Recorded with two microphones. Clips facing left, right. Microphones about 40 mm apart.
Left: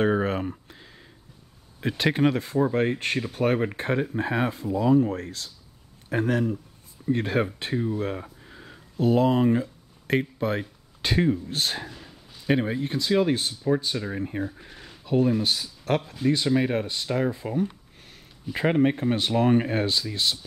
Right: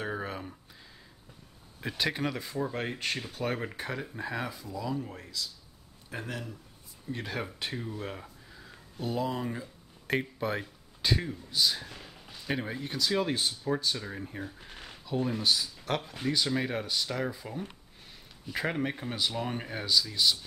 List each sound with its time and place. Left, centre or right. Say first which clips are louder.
0.0 s a sound: left 12 dB; left
0.7 s a sound: left 4 dB; left
1.9 s speech: left 9 dB; left
5.1 s speech: left 7 dB; left
7.7 s speech: left 11 dB; centre
8.2 s a sound: left 6 dB; left
8.9 s speech: left 11 dB; left
10.4 s speech: left 5 dB; left
11.0 s speech: left 8 dB; left
11.5 s speech: left 1 dB; left
12.4 s speech: left 9 dB; left